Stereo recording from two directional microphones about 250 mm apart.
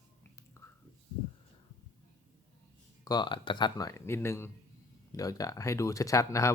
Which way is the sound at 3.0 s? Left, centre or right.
Centre.